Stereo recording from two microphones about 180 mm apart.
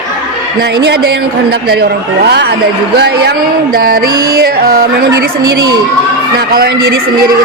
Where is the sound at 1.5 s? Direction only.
60° right (ahead or behind).